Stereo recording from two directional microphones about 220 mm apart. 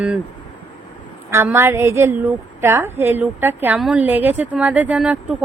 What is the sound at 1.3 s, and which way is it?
A woman's voice, 15° right (ahead or behind).